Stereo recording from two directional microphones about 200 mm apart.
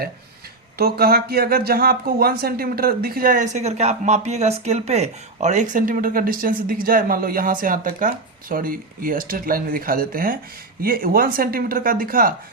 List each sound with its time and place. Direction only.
0.8 s speech: 50° right (ahead or behind)